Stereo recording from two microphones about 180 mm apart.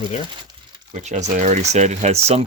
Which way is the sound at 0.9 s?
40° right (ahead or behind).